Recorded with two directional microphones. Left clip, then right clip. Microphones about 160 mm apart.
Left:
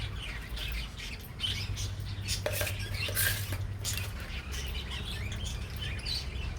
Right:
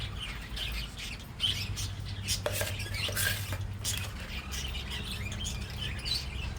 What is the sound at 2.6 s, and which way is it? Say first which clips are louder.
Cutlery: even; 10° right (ahead or behind).